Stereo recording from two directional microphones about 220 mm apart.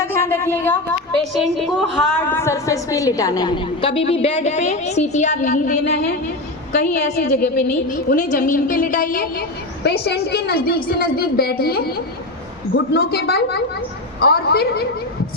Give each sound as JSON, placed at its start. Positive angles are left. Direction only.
{"t": 0.0, "sound": "a sound", "side_deg": 10}
{"t": 1.2, "sound": "a woman's voice", "side_deg": 0}
{"t": 2.3, "sound": "a woman's voice", "side_deg": 15}
{"t": 6.7, "sound": "a woman's voice", "side_deg": 45}